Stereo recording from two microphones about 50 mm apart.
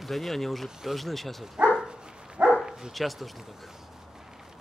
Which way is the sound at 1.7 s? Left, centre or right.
Centre.